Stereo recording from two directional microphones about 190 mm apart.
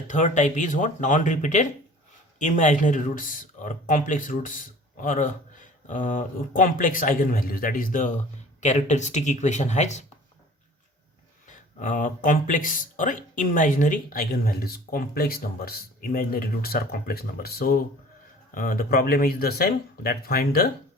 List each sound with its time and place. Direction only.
0.1 s speech: 40° left (ahead or behind)
11.4 s speech: 45° left (ahead or behind)